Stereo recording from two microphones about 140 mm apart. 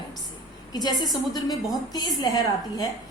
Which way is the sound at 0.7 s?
30° left (ahead or behind).